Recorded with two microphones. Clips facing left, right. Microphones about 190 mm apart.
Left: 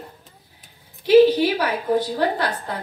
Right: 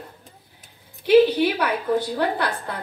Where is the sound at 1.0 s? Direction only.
60° right (ahead or behind).